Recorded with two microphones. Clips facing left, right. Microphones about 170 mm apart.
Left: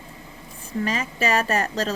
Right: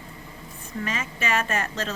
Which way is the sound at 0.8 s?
35° left (ahead or behind).